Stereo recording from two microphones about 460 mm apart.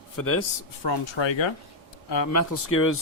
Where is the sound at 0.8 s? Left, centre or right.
Left.